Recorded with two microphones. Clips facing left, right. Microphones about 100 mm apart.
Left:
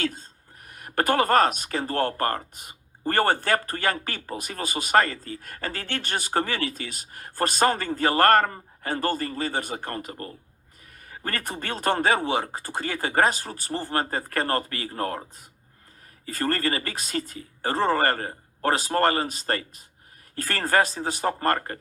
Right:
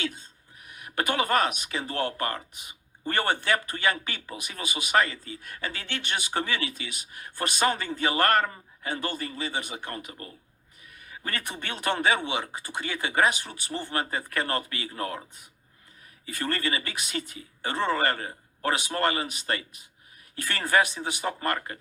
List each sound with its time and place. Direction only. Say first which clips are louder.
0.0 s speech: left 4 dB; 45° left (ahead or behind)